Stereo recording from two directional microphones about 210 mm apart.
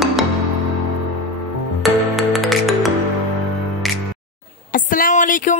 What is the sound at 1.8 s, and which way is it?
Music, centre (ahead or behind).